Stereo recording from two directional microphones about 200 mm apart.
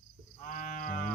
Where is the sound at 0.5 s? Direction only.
40° left (ahead or behind).